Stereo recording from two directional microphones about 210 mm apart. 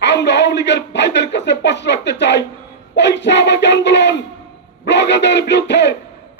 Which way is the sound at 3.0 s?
55° left (ahead or behind).